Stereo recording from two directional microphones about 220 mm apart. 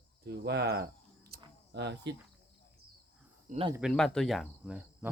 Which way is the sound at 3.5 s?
25° right (ahead or behind).